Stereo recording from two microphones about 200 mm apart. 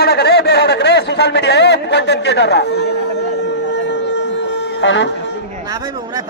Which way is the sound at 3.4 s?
60° left (ahead or behind).